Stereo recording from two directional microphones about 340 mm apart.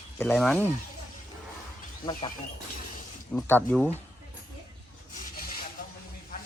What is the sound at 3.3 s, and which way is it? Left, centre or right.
Speech, centre.